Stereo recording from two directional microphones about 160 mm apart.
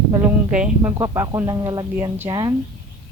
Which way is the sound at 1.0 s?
20° right (ahead or behind).